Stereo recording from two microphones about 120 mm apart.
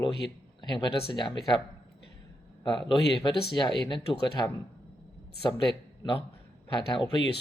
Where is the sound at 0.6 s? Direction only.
35° left (ahead or behind).